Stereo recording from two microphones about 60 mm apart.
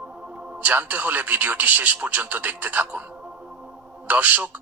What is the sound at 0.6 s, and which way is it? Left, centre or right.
Speech, right.